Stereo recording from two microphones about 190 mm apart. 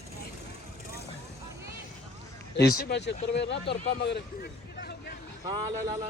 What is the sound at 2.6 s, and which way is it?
Speech, 60° left (ahead or behind).